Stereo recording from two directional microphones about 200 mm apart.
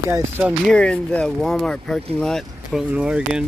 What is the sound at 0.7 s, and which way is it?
Speech, 5° left (ahead or behind).